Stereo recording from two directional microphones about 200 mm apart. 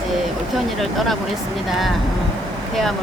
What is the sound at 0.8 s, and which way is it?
Speech, centre (ahead or behind).